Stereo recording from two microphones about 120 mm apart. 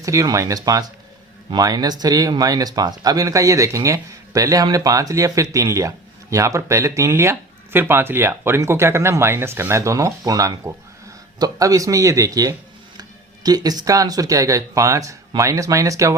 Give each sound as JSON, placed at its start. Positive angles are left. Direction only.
{"t": 0.0, "sound": "speech", "side_deg": -25}